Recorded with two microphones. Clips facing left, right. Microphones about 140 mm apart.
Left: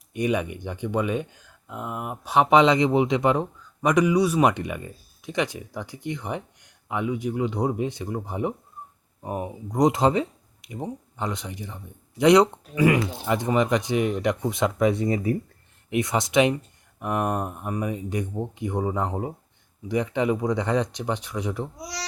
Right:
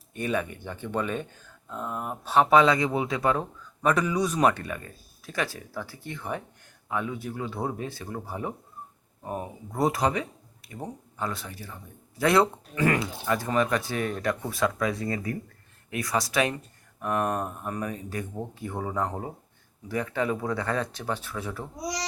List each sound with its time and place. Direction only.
0.1 s speech: 15° left (ahead or behind)